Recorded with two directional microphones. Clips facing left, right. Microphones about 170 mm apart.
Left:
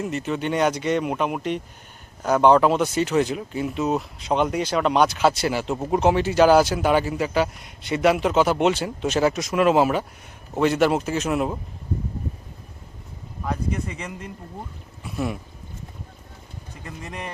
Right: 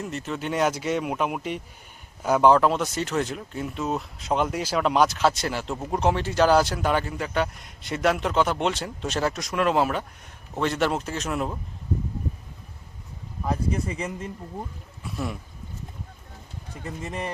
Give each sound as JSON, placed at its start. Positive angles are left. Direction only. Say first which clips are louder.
{"t": 0.0, "sound": "speech", "louder": "left 5 dB", "side_deg": 0}
{"t": 13.5, "sound": "speech", "louder": "right 1 dB", "side_deg": -35}
{"t": 15.0, "sound": "speech", "louder": "left 4 dB", "side_deg": 0}